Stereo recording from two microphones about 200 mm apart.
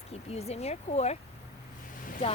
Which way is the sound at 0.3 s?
30° left (ahead or behind).